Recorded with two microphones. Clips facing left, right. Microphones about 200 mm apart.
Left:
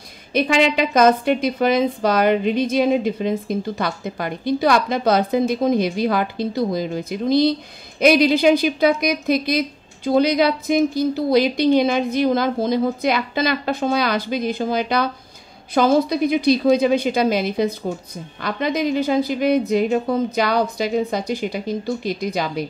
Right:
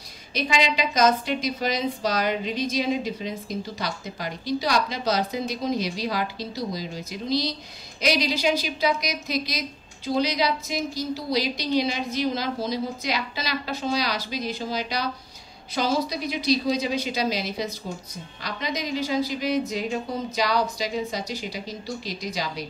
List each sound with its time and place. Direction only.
0.3 s a woman's voice: 55° left (ahead or behind)